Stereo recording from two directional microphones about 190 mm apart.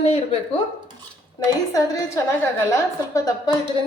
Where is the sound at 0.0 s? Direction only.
30° left (ahead or behind).